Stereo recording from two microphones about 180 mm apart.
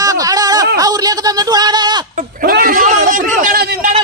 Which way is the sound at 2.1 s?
55° right (ahead or behind).